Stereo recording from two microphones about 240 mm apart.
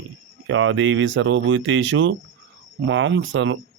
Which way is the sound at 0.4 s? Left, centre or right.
Right.